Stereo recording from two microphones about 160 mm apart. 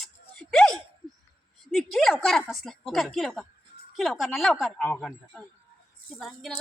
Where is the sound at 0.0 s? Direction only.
5° left (ahead or behind).